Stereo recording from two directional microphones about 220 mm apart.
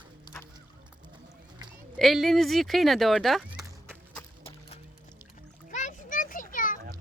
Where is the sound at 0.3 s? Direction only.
20° left (ahead or behind).